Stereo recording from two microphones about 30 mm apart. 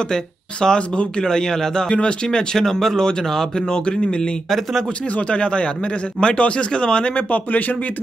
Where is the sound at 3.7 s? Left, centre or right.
Left.